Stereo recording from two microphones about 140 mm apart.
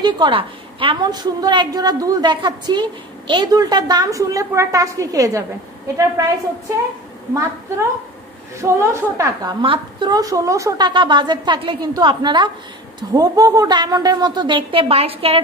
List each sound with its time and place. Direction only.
0.0 s a woman's voice: 35° right (ahead or behind)
8.5 s a woman's voice: 20° right (ahead or behind)
10.9 s a woman's voice: 35° right (ahead or behind)